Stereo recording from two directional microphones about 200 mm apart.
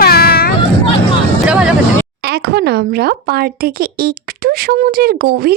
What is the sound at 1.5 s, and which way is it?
Vehicle, 5° right (ahead or behind).